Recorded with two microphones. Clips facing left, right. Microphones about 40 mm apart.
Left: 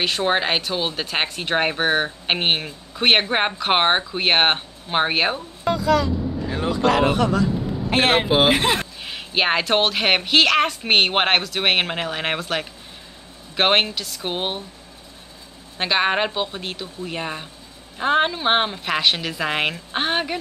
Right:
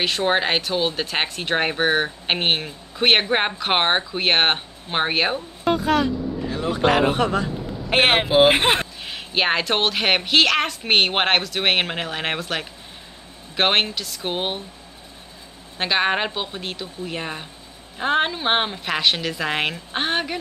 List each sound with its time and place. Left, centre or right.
0.0 s speech: centre
5.7 s speech: right
9.0 s speech: centre
15.8 s speech: centre